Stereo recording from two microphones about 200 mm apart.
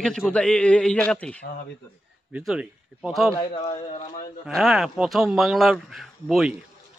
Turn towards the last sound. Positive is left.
turn(degrees=0)  # may be behind; listen again after turning